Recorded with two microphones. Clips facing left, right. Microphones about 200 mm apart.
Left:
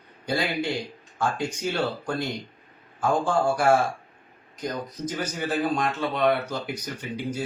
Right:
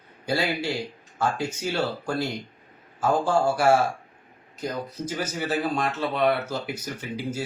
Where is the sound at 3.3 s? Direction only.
5° right (ahead or behind).